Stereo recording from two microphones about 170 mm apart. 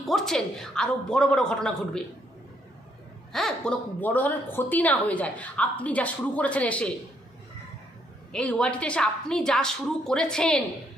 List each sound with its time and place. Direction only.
0.0 s a woman's voice: centre (ahead or behind)
3.3 s a woman's voice: 5° left (ahead or behind)
8.3 s a woman's voice: 5° left (ahead or behind)